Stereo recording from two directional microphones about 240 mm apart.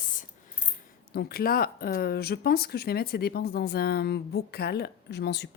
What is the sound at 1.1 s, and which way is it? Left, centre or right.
Speech, left.